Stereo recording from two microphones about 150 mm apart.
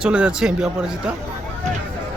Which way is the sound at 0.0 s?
5° right (ahead or behind).